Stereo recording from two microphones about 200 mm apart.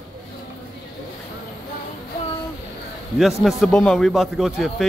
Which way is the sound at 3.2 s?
Centre (ahead or behind).